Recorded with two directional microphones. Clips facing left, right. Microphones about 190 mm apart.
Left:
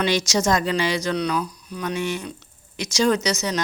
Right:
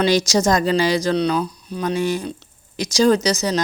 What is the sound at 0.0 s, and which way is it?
Speech, 35° right (ahead or behind).